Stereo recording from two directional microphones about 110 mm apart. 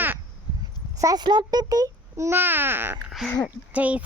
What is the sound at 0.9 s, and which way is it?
A child's voice, 35° right (ahead or behind).